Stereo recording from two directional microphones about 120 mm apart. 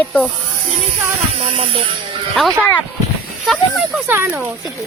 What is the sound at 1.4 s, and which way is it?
Speech, 50° right (ahead or behind).